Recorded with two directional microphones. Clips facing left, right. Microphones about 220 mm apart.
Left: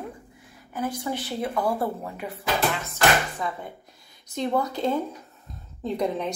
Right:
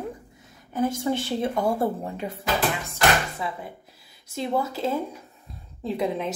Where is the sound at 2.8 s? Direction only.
10° right (ahead or behind).